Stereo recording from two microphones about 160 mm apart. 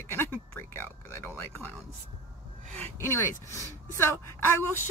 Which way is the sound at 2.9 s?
15° left (ahead or behind).